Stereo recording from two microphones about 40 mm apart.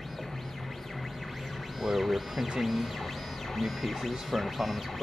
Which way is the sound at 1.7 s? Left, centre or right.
Centre.